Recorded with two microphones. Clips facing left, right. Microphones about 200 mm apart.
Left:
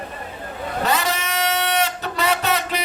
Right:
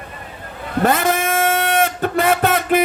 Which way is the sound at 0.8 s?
50° right (ahead or behind).